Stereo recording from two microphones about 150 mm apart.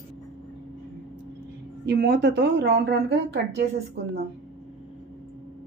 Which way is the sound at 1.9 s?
90° right.